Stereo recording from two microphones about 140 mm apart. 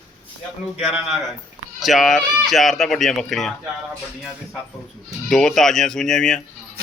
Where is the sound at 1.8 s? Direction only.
Centre (ahead or behind).